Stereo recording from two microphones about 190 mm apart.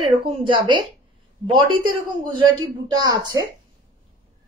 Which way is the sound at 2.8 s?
20° right (ahead or behind).